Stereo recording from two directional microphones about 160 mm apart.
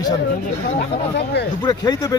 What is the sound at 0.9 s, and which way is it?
Speech, 90° left.